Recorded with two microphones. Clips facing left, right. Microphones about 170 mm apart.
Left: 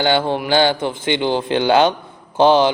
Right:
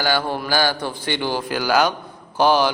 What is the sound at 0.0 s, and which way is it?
Speech, 20° left (ahead or behind).